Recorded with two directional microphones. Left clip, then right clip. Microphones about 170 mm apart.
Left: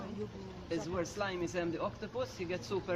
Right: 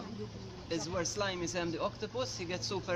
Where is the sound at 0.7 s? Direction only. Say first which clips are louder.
Right 1 dB; 65° right (ahead or behind).